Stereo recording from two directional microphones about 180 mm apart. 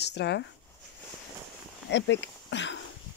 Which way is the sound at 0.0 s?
70° left (ahead or behind).